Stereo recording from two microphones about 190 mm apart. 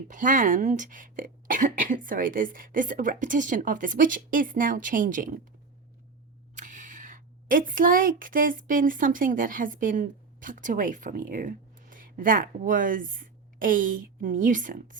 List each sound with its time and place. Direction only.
0.1 s speech: 45° right (ahead or behind)
6.6 s a woman's voice: 40° right (ahead or behind)